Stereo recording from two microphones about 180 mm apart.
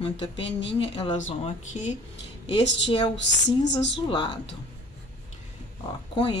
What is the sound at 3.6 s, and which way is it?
Speech, 80° left.